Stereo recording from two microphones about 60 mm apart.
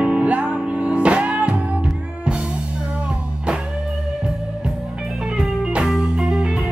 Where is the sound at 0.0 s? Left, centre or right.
Right.